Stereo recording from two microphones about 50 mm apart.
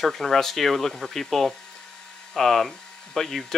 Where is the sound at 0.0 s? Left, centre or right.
Centre.